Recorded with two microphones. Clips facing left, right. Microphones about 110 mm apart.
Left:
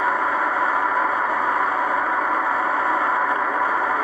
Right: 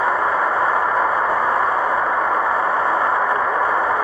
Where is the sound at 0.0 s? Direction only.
35° right (ahead or behind).